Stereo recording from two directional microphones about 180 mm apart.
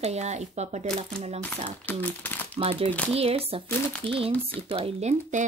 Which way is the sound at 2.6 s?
30° right (ahead or behind).